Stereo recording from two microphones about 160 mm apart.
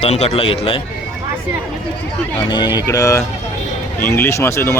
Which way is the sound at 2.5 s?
25° left (ahead or behind).